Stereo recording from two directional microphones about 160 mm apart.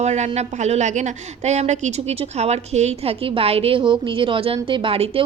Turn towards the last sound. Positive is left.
turn(degrees=-35)  # may be behind; listen again after turning